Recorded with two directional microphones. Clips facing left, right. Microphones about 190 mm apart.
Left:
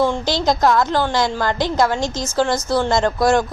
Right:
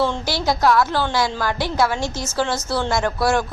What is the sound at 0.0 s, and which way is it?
A woman's voice, 15° left (ahead or behind).